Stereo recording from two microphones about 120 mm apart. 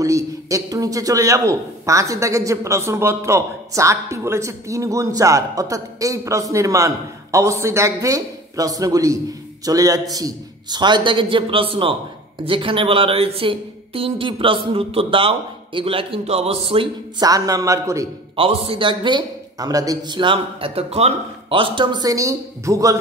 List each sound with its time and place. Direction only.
0.0 s a man's voice: 25° right (ahead or behind); by 16.9 s 50° right (ahead or behind)
17.2 s a man's voice: 30° right (ahead or behind)
18.3 s a man's voice: 50° right (ahead or behind); by 22.9 s 30° right (ahead or behind)